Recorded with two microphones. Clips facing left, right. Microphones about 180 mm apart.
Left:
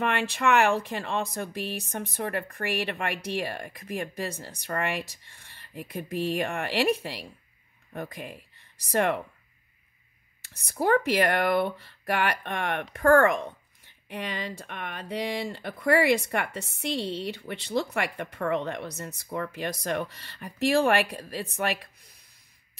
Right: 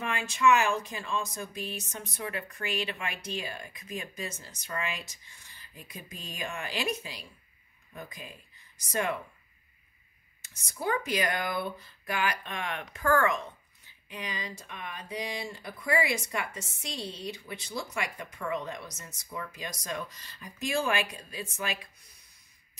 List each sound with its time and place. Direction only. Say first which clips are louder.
0.0 s speech: left 1 dB; 65° left (ahead or behind)
10.5 s speech: left 8 dB; 60° left (ahead or behind)